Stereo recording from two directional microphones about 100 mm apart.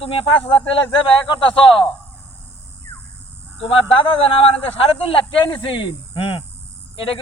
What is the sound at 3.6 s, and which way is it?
Speech, 65° left (ahead or behind).